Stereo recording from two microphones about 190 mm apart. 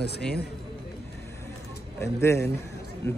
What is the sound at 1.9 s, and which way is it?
Speech, 15° left (ahead or behind).